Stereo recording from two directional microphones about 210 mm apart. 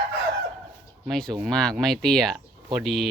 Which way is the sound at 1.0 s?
Centre (ahead or behind).